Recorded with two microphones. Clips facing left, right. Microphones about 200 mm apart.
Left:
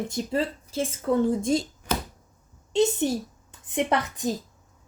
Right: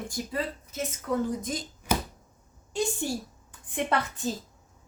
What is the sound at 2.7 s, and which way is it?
Speech, 20° left (ahead or behind).